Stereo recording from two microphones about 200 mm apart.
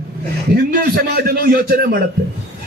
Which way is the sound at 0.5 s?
50° right (ahead or behind).